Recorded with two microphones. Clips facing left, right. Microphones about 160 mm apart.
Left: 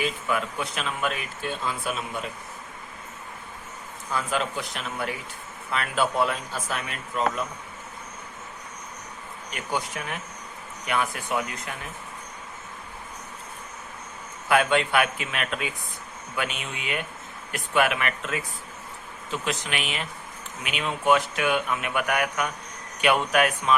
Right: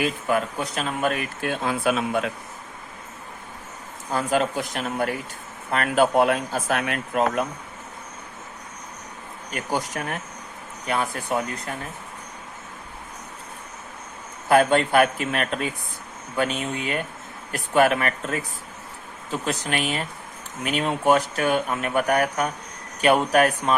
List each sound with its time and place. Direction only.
0.0 s speech: 40° right (ahead or behind); by 2.3 s 85° right
4.1 s speech: 45° right (ahead or behind); by 7.4 s 60° right (ahead or behind)
9.5 s speech: 40° right (ahead or behind)
10.8 s speech: 35° right (ahead or behind)
14.4 s speech: 40° right (ahead or behind)